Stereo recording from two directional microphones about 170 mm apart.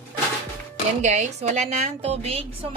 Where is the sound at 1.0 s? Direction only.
45° right (ahead or behind).